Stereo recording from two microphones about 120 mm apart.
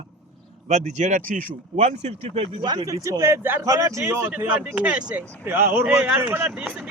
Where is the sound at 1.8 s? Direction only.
65° right (ahead or behind).